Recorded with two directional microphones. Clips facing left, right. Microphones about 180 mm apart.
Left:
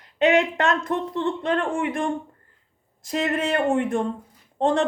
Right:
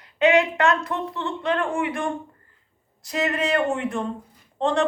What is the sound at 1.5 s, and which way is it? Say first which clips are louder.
Speech: right 2 dB; 40° left (ahead or behind).